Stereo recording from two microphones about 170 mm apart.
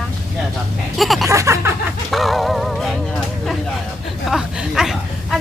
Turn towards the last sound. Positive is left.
turn(degrees=0)  # may be behind; listen again after turning